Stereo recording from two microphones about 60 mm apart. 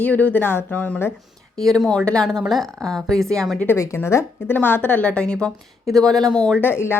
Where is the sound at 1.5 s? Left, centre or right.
Centre.